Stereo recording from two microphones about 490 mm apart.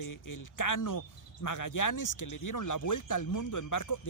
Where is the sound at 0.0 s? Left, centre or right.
Left.